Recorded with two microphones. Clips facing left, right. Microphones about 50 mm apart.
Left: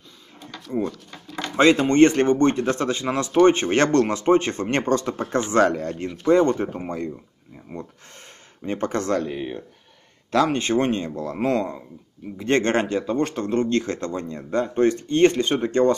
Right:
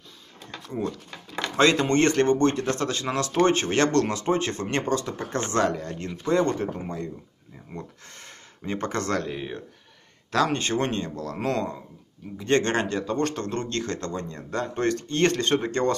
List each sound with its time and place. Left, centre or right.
1.6 s speech: left
5.9 s speech: left
8.6 s speech: left
10.3 s speech: left